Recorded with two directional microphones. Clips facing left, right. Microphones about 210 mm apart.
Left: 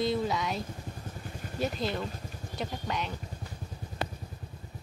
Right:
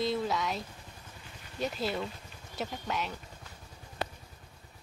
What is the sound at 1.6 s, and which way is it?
Speech, centre (ahead or behind).